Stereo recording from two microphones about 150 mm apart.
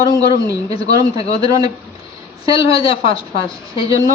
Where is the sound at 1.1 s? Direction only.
40° left (ahead or behind).